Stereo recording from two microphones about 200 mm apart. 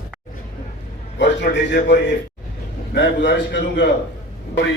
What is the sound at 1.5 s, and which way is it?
A man's voice, 60° left (ahead or behind).